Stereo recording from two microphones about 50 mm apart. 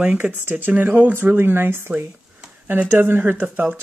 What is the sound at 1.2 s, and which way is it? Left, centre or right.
Speech, right.